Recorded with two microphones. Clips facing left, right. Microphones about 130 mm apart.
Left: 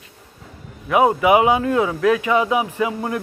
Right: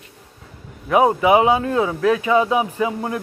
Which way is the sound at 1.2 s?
25° right (ahead or behind).